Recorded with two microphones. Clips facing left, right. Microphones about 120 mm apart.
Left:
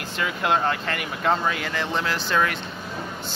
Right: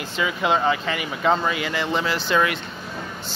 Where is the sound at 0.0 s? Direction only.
Centre (ahead or behind).